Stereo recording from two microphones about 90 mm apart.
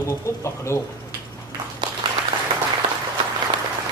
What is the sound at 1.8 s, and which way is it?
Applause, 60° right (ahead or behind).